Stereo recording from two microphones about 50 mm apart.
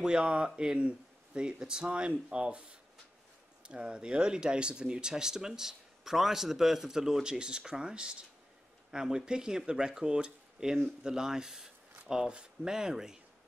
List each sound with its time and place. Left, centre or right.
0.0 s speech: centre